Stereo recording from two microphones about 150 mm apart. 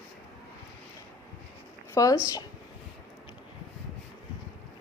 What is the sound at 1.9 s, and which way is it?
Speech, 20° left (ahead or behind).